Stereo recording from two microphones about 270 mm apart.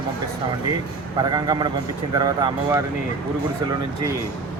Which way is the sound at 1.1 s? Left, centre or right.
Centre.